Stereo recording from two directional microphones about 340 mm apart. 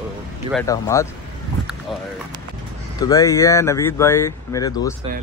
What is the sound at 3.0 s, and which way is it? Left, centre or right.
Speech, centre.